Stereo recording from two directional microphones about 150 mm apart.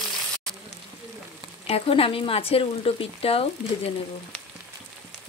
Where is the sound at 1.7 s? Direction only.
40° left (ahead or behind).